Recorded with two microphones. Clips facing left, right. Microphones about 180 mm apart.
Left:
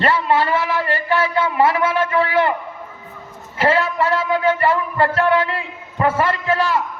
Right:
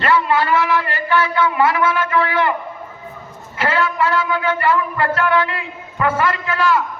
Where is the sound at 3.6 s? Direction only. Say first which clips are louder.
Left 1 dB; 30° left (ahead or behind).